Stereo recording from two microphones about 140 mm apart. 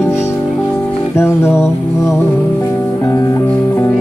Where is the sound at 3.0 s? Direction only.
25° left (ahead or behind).